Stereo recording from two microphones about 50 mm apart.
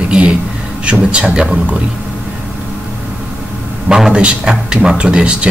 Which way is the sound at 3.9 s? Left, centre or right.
Centre.